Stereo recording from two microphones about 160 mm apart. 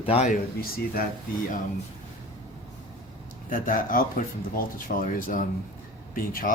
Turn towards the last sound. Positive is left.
turn(degrees=60)  # may be behind; listen again after turning